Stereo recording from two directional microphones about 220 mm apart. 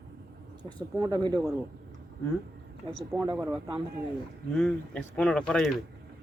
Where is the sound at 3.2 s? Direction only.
20° right (ahead or behind).